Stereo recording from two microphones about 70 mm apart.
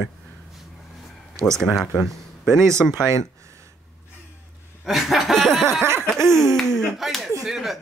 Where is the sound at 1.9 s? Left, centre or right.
Centre.